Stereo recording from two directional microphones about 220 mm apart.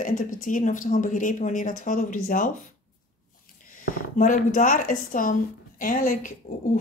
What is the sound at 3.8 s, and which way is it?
Speech, 35° left (ahead or behind).